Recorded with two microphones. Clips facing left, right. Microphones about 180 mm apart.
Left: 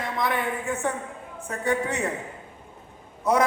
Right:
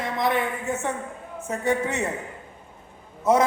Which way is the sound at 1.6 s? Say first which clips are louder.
Right 1 dB; 20° right (ahead or behind).